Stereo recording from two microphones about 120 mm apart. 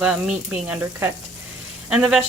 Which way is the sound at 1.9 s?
5° right (ahead or behind).